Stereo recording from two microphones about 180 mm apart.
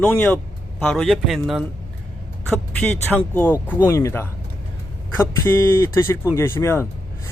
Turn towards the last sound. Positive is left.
turn(degrees=15)  # may be behind; listen again after turning